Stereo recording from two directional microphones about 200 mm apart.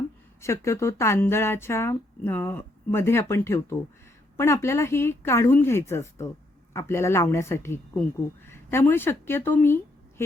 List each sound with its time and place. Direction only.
0.4 s a woman's voice: 15° left (ahead or behind)